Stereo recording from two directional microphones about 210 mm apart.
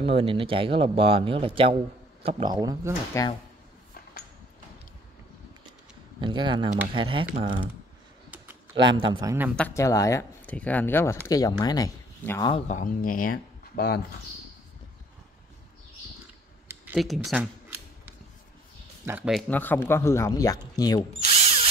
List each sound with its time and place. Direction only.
0.0 s speech: 25° right (ahead or behind)
3.2 s speech: 15° left (ahead or behind)
6.2 s speech: 20° right (ahead or behind)
8.7 s speech: 25° right (ahead or behind)
9.6 s speech: 15° left (ahead or behind)
12.6 s speech: 40° left (ahead or behind)
16.6 s a sound: 5° right (ahead or behind)
19.0 s speech: 5° right (ahead or behind)
19.5 s speech: 10° left (ahead or behind)